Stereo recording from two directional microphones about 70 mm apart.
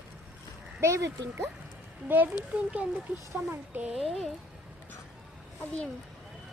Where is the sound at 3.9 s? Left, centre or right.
Centre.